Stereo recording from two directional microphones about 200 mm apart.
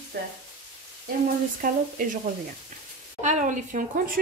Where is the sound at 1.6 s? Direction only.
45° right (ahead or behind).